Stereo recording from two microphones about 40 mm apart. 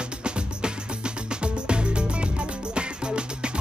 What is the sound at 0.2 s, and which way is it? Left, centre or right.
Music, right.